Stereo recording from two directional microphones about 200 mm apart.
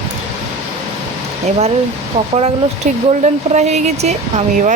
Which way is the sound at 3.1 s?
35° right (ahead or behind).